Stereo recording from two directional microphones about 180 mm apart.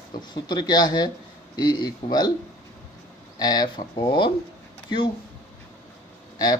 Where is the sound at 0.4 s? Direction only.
25° left (ahead or behind).